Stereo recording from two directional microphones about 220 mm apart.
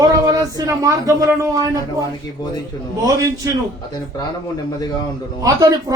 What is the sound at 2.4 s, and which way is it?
Speech, 20° left (ahead or behind).